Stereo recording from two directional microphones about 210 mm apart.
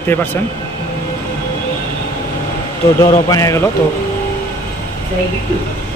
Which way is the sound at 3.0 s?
15° left (ahead or behind).